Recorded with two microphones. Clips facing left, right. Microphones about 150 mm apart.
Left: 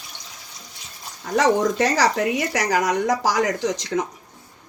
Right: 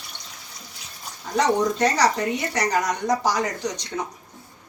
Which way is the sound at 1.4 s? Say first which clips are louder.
Left 2 dB; 90° left.